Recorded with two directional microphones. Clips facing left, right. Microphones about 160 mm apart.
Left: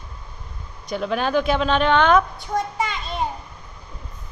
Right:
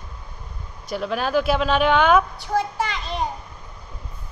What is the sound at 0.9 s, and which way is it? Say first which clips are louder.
A woman's voice: left 1 dB; centre (ahead or behind).